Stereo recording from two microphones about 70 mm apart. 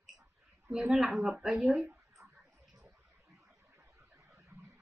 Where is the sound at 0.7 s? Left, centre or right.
Centre.